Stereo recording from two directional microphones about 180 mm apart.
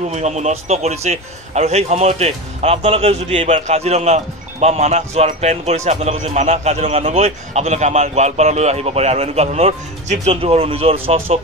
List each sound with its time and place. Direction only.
0.1 s a man's voice: 40° right (ahead or behind)